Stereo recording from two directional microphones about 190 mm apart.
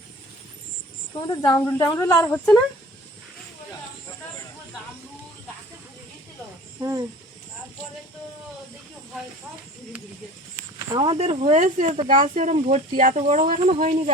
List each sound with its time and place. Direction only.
1.4 s a woman's voice: 15° left (ahead or behind)
6.7 s speech: 15° right (ahead or behind)
10.8 s speech: 25° right (ahead or behind)